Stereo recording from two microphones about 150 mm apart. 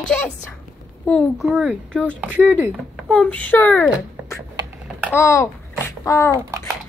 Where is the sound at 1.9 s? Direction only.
5° left (ahead or behind).